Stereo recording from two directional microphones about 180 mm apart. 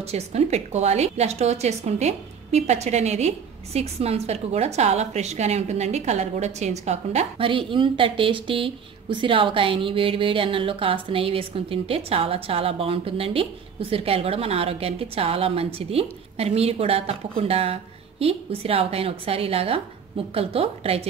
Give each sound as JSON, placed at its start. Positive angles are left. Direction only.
{"t": 0.0, "sound": "a woman's voice", "side_deg": -35}